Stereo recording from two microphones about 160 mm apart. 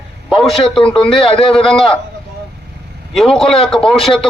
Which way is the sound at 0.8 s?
35° left (ahead or behind).